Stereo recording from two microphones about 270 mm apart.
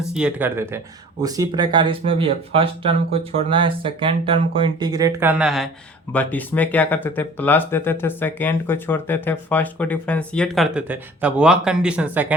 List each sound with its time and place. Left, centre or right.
0.1 s speech: centre